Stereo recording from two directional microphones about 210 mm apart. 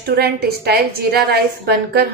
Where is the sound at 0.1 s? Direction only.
50° right (ahead or behind).